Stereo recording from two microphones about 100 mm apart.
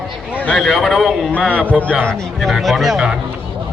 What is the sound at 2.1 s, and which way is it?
Speech, centre (ahead or behind).